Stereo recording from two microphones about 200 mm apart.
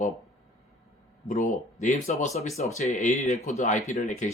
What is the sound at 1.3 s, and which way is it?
Speech, 35° left (ahead or behind).